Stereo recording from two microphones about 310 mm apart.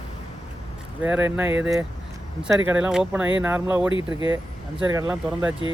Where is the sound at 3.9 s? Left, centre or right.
Centre.